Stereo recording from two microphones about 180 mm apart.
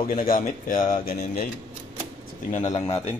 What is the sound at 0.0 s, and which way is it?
Speech, 50° left (ahead or behind).